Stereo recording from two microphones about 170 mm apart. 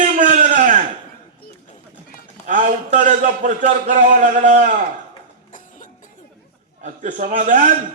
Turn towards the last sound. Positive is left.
turn(degrees=-50)  # may be behind; listen again after turning